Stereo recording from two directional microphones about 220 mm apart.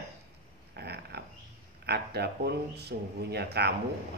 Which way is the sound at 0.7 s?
50° right (ahead or behind).